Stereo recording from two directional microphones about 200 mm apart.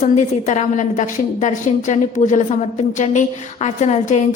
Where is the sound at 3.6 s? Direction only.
35° left (ahead or behind).